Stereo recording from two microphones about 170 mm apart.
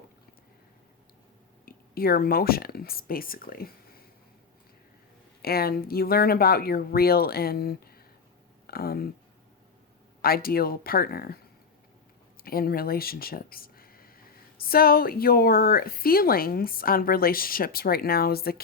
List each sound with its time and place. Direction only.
1.6 s speech: 60° left (ahead or behind)
5.4 s speech: 65° left (ahead or behind)
10.2 s speech: 60° left (ahead or behind)
12.4 s speech: 60° left (ahead or behind)